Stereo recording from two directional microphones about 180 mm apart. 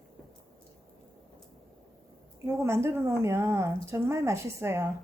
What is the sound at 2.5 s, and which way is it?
Speech, 15° right (ahead or behind).